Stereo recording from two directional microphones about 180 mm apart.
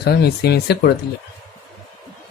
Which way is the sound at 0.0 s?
65° left (ahead or behind).